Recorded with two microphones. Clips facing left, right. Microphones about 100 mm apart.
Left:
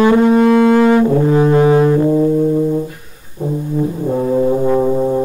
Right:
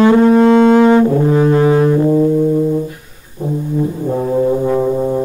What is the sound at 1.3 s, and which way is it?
Music, 20° left (ahead or behind).